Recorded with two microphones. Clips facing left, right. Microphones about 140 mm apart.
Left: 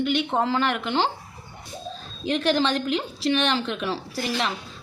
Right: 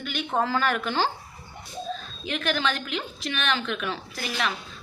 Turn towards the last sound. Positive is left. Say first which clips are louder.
# left 3 dB
turn(degrees=30)  # may be behind; listen again after turning